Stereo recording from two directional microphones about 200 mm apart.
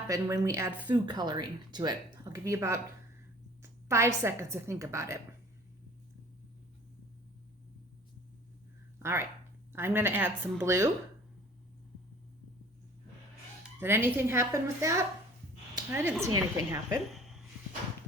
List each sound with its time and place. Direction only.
0.1 s speech: 15° right (ahead or behind)
9.0 s a sound: 15° right (ahead or behind)
9.7 s speech: 10° right (ahead or behind)
13.7 s speech: 10° right (ahead or behind)
15.7 s a sound: 10° right (ahead or behind)
16.2 s speech: 15° right (ahead or behind)